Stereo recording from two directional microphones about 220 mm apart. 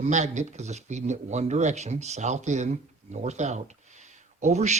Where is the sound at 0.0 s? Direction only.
30° right (ahead or behind).